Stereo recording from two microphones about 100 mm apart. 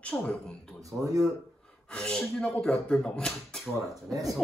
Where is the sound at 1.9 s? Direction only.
10° left (ahead or behind).